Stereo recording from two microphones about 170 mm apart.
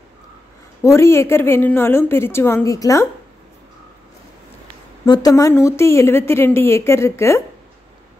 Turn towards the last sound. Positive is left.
turn(degrees=15)  # may be behind; listen again after turning